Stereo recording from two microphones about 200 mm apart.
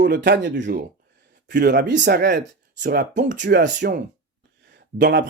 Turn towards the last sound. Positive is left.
turn(degrees=-65)  # may be behind; listen again after turning